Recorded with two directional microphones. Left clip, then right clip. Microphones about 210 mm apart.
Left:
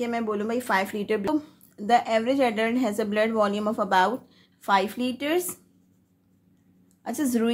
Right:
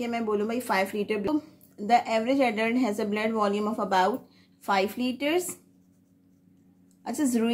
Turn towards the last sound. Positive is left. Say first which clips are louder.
# left 1 dB
turn(degrees=20)  # may be behind; listen again after turning